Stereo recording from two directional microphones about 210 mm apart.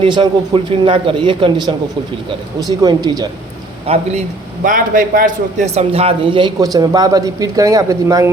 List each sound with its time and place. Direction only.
0.0 s speech: 25° right (ahead or behind)
3.8 s speech: 30° right (ahead or behind)
4.6 s a man's voice: 40° right (ahead or behind); by 8.3 s 15° right (ahead or behind)